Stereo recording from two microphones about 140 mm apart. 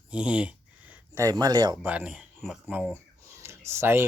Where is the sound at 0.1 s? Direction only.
10° right (ahead or behind).